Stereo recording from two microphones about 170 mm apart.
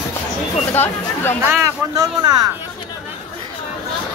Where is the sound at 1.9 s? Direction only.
20° right (ahead or behind).